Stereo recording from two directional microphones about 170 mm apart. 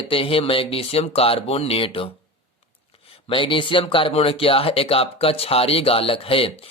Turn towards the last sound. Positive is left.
turn(degrees=35)  # may be behind; listen again after turning